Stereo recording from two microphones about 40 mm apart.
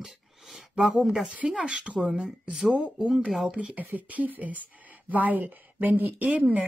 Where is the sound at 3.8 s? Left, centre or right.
Right.